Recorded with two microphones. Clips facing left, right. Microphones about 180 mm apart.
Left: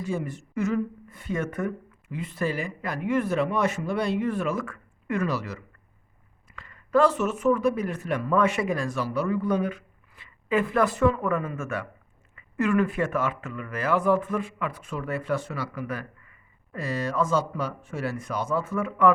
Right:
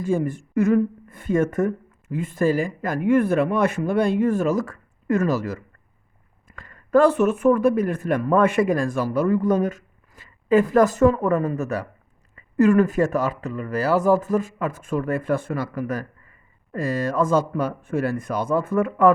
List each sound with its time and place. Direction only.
0.0 s speech: 50° right (ahead or behind)